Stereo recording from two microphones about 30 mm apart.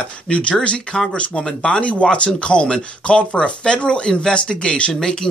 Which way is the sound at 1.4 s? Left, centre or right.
Left.